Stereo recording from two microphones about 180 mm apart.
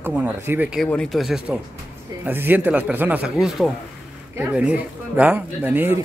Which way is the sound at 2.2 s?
10° right (ahead or behind).